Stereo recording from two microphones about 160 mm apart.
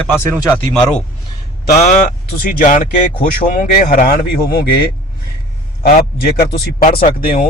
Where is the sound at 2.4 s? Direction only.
55° left (ahead or behind).